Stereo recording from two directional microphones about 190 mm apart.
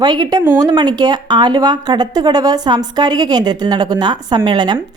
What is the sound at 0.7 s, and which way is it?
Speech, 20° right (ahead or behind).